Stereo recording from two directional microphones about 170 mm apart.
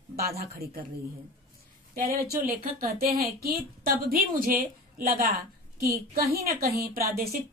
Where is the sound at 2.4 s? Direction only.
60° right (ahead or behind).